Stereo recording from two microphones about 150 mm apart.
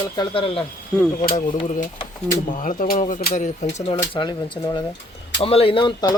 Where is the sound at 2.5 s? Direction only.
65° left (ahead or behind).